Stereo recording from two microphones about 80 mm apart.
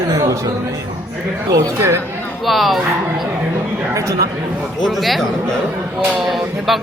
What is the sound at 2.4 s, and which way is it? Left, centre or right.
Speech, centre.